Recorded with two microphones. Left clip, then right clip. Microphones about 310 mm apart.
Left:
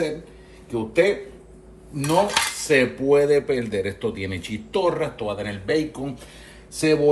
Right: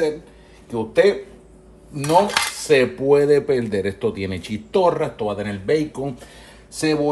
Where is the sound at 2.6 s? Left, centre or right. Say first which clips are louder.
Right 3 dB; right.